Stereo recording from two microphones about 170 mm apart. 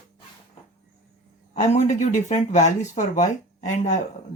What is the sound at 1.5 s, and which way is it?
Speech, 40° left (ahead or behind).